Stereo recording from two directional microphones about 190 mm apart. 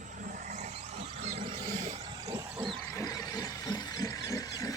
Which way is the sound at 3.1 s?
20° left (ahead or behind).